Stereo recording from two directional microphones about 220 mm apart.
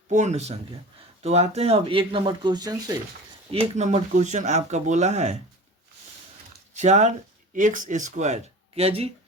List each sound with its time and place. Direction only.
0.1 s speech: 30° right (ahead or behind); by 3.0 s 15° right (ahead or behind)
3.5 s speech: 30° right (ahead or behind)
6.7 s speech: 30° right (ahead or behind)